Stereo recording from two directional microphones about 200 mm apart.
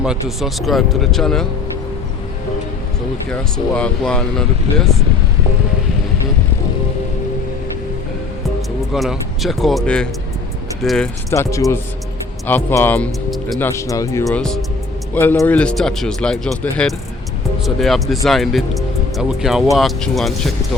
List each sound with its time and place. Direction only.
0.0 s speech: 5° right (ahead or behind)
3.2 s speech: 5° left (ahead or behind)
8.9 s speech: centre (ahead or behind)
11.3 s speech: 15° left (ahead or behind)
13.7 s speech: 15° left (ahead or behind)